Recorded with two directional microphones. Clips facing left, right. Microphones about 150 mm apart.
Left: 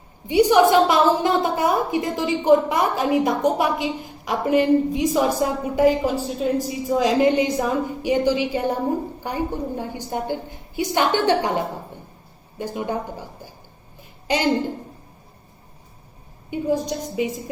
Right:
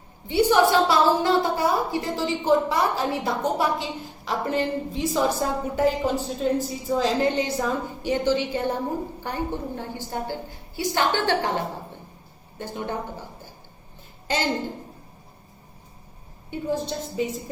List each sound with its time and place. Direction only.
0.3 s a woman's voice: 15° left (ahead or behind)
16.5 s a woman's voice: 15° left (ahead or behind)